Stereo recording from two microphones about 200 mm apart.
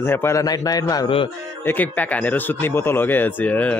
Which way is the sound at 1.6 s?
10° left (ahead or behind).